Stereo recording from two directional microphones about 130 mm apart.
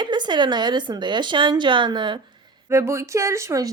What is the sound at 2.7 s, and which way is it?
Speech, 20° right (ahead or behind).